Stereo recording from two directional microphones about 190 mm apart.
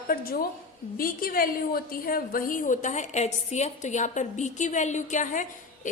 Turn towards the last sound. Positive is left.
turn(degrees=40)  # may be behind; listen again after turning